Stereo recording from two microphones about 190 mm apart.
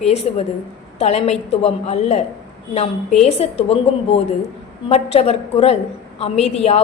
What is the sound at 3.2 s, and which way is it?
A woman's voice, 35° left (ahead or behind).